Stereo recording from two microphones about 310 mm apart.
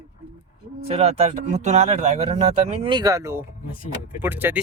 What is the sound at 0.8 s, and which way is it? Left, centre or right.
Speech, centre.